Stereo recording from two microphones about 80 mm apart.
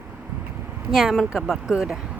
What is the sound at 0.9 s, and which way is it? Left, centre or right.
Speech, centre.